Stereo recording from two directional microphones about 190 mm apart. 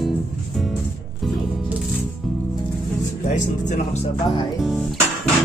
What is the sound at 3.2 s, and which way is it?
Speech, 40° left (ahead or behind).